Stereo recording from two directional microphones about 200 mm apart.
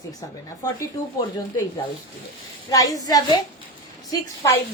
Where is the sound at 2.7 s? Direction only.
15° left (ahead or behind).